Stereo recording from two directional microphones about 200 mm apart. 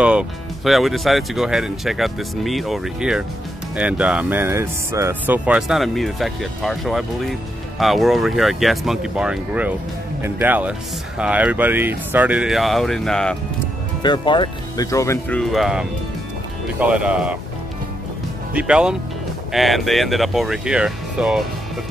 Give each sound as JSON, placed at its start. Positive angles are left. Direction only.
{"t": 0.0, "sound": "speech", "side_deg": -5}
{"t": 14.0, "sound": "speech", "side_deg": 20}
{"t": 18.5, "sound": "speech", "side_deg": -5}